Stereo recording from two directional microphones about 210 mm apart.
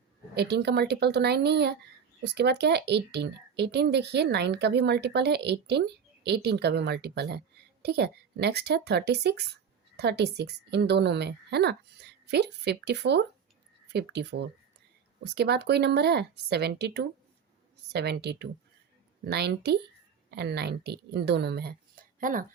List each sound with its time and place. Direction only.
0.3 s speech: 50° right (ahead or behind)